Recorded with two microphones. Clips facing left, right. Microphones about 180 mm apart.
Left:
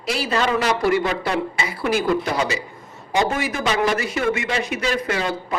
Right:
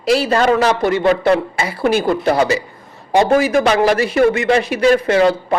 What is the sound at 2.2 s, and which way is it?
Speech, 60° right (ahead or behind).